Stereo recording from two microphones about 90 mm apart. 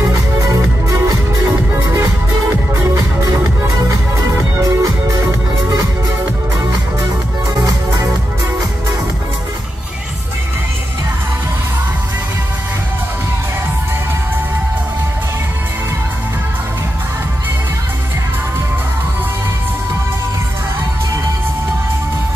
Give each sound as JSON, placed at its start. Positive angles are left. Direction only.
{"t": 0.0, "sound": "music", "side_deg": -35}
{"t": 4.6, "sound": "music", "side_deg": -40}